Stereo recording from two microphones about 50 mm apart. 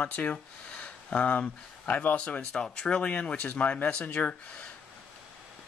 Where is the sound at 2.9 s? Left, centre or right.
Left.